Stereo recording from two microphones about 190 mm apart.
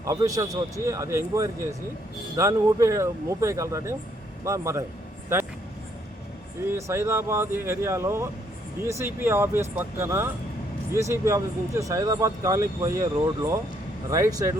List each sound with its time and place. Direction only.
0.0 s speech: 15° right (ahead or behind)
6.7 s speech: 15° right (ahead or behind)